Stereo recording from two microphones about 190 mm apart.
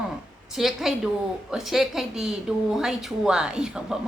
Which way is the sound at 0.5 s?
Centre (ahead or behind).